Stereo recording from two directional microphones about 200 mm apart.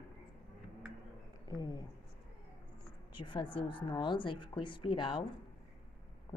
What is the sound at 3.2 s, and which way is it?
A woman's voice, 25° left (ahead or behind).